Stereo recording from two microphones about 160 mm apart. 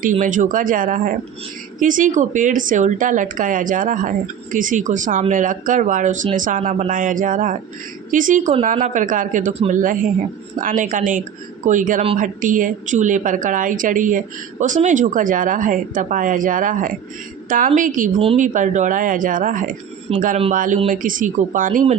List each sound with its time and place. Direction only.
0.0 s a woman's voice: 55° right (ahead or behind)
20.1 s speech: 40° right (ahead or behind)
20.5 s a woman's voice: 55° right (ahead or behind)